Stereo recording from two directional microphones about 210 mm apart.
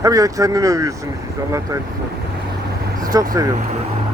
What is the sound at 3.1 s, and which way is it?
Speech, 15° right (ahead or behind).